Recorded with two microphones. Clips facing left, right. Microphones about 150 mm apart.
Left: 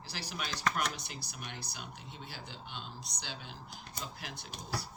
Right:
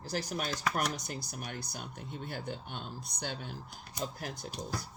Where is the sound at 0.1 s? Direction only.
50° right (ahead or behind).